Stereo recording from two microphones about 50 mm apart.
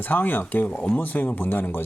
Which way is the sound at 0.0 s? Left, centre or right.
Left.